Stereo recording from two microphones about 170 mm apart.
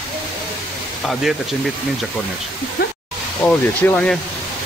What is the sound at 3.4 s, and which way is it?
Speech, 10° left (ahead or behind).